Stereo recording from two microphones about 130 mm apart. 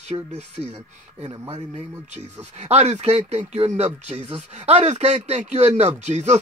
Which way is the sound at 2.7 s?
55° right (ahead or behind).